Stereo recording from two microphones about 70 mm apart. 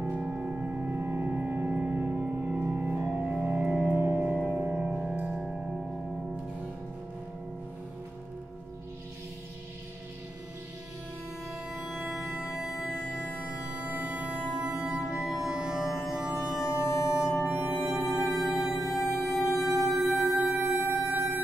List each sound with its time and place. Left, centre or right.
0.0 s music: right
3.6 s music: centre
12.1 s music: centre
18.3 s music: centre
20.4 s music: right